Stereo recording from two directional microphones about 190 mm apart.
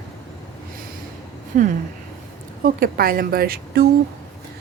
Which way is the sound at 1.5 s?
45° right (ahead or behind).